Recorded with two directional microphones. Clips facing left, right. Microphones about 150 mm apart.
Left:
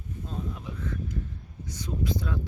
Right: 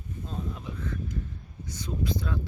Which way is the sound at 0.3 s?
5° left (ahead or behind).